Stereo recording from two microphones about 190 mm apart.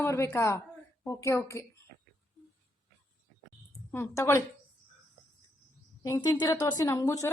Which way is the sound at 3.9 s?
15° left (ahead or behind).